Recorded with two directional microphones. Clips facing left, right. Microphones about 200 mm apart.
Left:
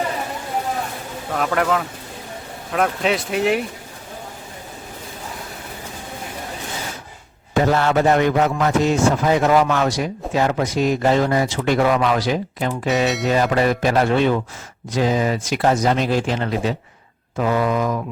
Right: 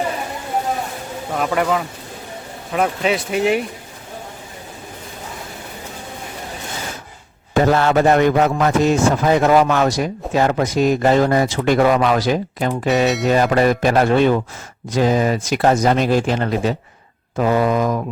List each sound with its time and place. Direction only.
1.3 s speech: 5° right (ahead or behind)
7.5 s a man's voice: 45° right (ahead or behind)